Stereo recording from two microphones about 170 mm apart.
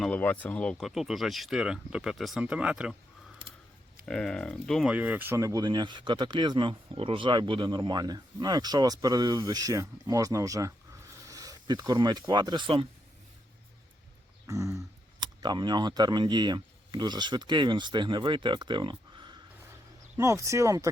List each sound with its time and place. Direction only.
0.0 s speech: 10° left (ahead or behind); by 2.9 s 5° right (ahead or behind)
4.0 s speech: 5° left (ahead or behind); by 12.9 s 30° right (ahead or behind)
14.4 s a sound: 15° right (ahead or behind)
15.2 s speech: 25° right (ahead or behind)
20.1 s speech: 15° right (ahead or behind)